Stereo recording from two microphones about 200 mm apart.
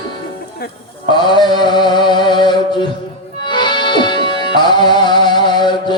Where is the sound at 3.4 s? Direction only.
20° left (ahead or behind).